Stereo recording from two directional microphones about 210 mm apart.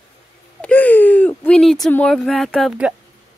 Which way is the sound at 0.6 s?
10° left (ahead or behind).